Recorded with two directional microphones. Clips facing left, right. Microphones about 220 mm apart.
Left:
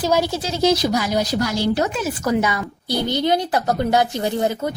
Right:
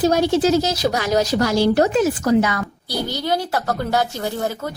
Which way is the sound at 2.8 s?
20° left (ahead or behind).